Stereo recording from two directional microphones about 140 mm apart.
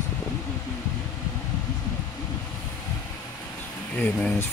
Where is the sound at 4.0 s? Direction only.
10° left (ahead or behind).